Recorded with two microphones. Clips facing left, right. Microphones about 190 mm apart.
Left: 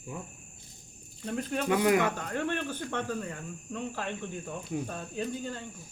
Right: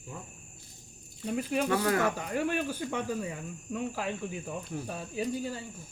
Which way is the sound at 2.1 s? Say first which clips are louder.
Right 2 dB; 10° right (ahead or behind).